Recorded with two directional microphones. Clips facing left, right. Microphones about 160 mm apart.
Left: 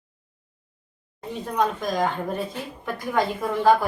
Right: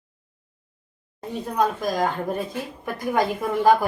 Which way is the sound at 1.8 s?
10° right (ahead or behind).